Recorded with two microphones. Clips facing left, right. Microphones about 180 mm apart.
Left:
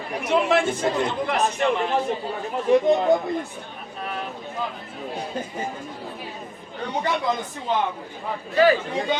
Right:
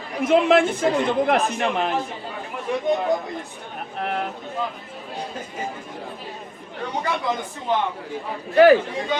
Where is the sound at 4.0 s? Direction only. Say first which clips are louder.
Right 5 dB; 60° right (ahead or behind).